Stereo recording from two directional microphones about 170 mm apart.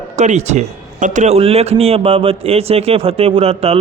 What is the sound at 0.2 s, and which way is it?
A man's voice, 40° right (ahead or behind).